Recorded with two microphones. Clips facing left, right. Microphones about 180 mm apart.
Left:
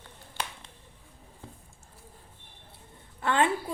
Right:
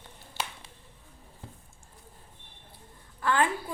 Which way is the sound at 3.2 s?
25° left (ahead or behind).